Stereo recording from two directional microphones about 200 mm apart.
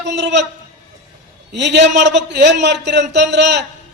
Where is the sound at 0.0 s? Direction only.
60° right (ahead or behind).